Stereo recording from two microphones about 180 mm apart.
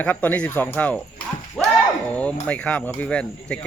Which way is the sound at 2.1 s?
5° left (ahead or behind).